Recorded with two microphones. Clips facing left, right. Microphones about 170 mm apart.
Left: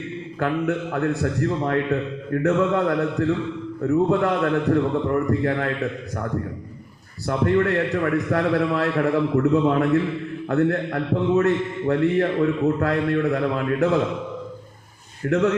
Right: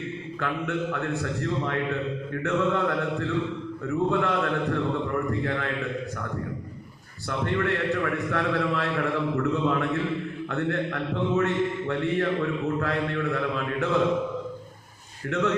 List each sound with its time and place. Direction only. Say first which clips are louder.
0.3 s a man's voice: left 6 dB; 45° left (ahead or behind)
7.3 s a man's voice: left 7 dB; 40° left (ahead or behind)
15.3 s a man's voice: left 6 dB; 40° left (ahead or behind)